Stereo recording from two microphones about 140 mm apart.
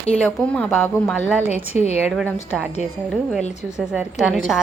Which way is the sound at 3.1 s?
Centre (ahead or behind).